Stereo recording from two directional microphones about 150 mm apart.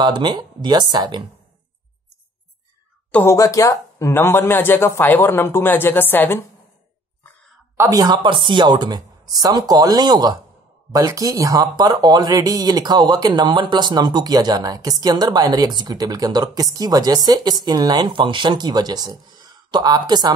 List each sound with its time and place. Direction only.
0.0 s speech: 30° right (ahead or behind)
3.1 s speech: 15° left (ahead or behind)
7.7 s speech: 20° right (ahead or behind)